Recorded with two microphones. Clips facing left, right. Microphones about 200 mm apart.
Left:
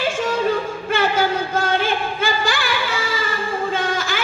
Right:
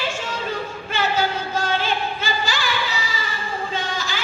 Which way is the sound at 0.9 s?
50° left (ahead or behind).